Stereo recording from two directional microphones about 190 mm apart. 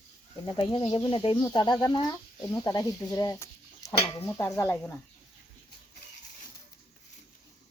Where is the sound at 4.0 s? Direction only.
30° left (ahead or behind).